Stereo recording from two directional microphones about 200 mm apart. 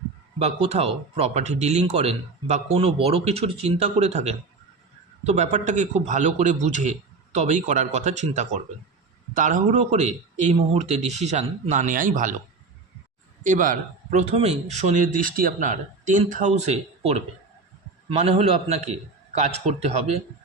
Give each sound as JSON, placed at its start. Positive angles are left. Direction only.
{"t": 0.3, "sound": "speech", "side_deg": -30}
{"t": 13.4, "sound": "speech", "side_deg": -40}
{"t": 18.3, "sound": "speech", "side_deg": -30}